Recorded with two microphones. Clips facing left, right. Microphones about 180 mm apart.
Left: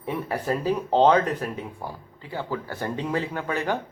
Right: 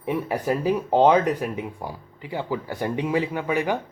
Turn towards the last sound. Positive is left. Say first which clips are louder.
# right 3 dB
turn(degrees=-10)  # may be behind; listen again after turning